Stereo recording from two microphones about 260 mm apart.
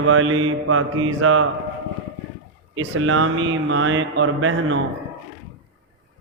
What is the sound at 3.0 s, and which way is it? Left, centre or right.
Speech, right.